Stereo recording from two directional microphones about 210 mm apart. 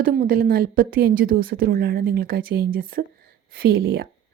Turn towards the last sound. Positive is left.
turn(degrees=-50)  # may be behind; listen again after turning